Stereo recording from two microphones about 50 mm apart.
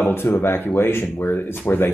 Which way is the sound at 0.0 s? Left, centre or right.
Left.